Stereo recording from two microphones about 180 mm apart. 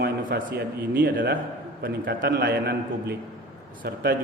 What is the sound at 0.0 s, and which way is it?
A man's voice, 60° right (ahead or behind).